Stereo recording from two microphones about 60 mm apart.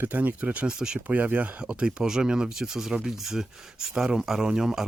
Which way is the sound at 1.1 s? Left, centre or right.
Right.